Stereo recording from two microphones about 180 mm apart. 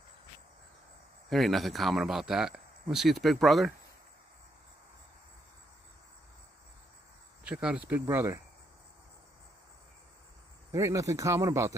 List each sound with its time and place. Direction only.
1.3 s speech: centre (ahead or behind)
7.4 s speech: 5° right (ahead or behind)
10.7 s speech: 15° right (ahead or behind)